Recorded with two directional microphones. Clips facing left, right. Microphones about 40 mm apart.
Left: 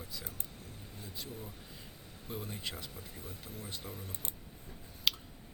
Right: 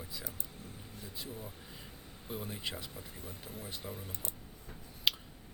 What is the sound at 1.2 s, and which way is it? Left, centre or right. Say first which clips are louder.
Speech: right 1 dB; centre.